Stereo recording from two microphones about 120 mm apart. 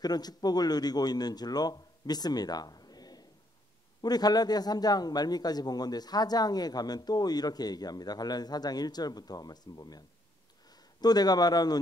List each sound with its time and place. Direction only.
0.0 s a man's voice: 35° left (ahead or behind)